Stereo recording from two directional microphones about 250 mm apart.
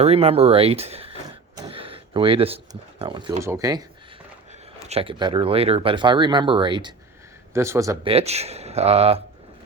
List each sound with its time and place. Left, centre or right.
0.0 s speech: right
1.5 s gasp: centre
3.0 s speech: centre
4.9 s speech: right
8.1 s speech: right